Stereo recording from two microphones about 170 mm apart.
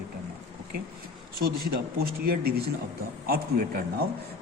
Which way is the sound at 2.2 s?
65° right (ahead or behind).